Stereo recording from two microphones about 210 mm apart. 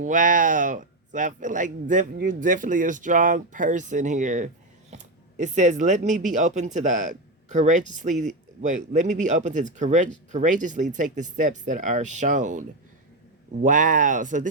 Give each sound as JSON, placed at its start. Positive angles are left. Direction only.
{"t": 0.0, "sound": "speech", "side_deg": -40}